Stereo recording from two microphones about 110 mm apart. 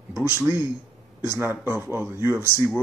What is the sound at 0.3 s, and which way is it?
Speech, 20° right (ahead or behind).